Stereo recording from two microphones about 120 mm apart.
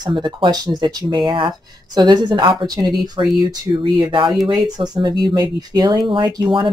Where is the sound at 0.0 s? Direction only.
40° right (ahead or behind).